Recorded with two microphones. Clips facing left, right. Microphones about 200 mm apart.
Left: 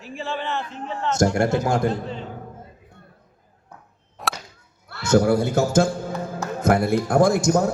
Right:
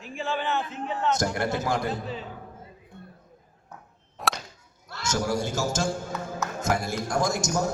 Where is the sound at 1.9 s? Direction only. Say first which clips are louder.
Left 4 dB; 5° right (ahead or behind).